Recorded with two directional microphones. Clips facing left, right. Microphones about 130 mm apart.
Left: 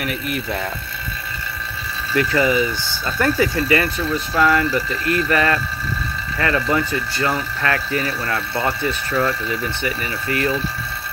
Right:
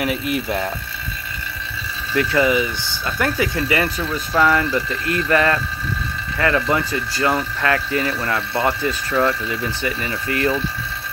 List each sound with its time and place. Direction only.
0.0 s speech: 20° right (ahead or behind)
2.1 s speech: 20° right (ahead or behind)